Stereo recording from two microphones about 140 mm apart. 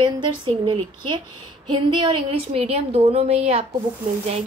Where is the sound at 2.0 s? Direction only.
45° right (ahead or behind).